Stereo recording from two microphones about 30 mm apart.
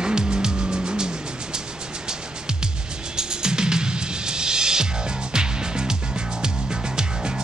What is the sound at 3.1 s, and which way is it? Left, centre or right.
Music, right.